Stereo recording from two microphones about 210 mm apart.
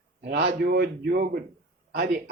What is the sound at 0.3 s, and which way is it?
Speech, 50° right (ahead or behind).